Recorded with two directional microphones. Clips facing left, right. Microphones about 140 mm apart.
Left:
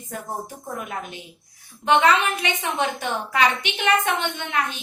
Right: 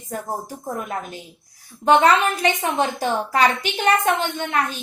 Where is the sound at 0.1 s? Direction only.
40° right (ahead or behind).